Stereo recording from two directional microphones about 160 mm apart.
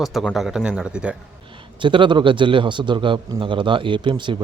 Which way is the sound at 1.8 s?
30° right (ahead or behind).